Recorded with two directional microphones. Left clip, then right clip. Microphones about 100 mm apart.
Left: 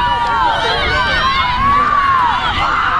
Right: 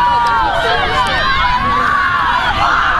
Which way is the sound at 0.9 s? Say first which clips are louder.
Even; 30° right (ahead or behind).